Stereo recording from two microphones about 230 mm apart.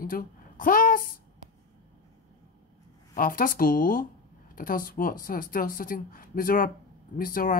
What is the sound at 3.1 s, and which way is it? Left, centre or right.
Speech, left.